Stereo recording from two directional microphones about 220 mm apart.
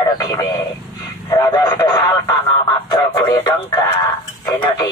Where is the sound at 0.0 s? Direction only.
15° left (ahead or behind).